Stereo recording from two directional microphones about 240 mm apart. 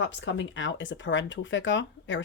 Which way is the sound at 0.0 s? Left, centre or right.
Left.